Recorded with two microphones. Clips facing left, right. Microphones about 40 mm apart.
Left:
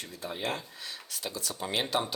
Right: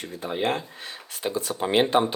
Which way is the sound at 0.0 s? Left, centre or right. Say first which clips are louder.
Right 8 dB; right.